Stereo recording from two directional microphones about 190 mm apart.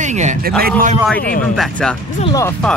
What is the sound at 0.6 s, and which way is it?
Speech, 50° right (ahead or behind).